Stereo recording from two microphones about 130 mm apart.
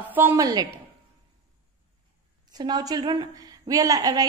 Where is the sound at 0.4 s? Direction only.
30° right (ahead or behind).